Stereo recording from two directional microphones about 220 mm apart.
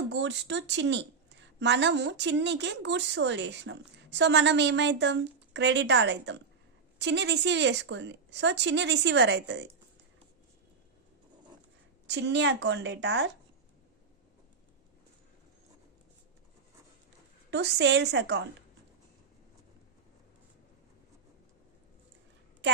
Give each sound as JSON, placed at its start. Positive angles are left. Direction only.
{"t": 0.1, "sound": "a woman's voice", "side_deg": -55}
{"t": 12.0, "sound": "a woman's voice", "side_deg": -50}
{"t": 17.5, "sound": "a woman's voice", "side_deg": -50}